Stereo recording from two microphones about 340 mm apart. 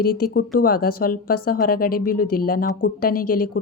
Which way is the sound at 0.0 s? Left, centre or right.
Left.